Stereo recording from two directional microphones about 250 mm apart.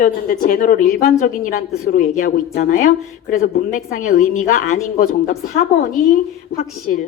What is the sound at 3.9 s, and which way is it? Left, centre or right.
Speech, left.